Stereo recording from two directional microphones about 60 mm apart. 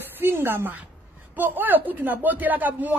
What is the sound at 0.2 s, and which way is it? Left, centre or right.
A woman's voice, right.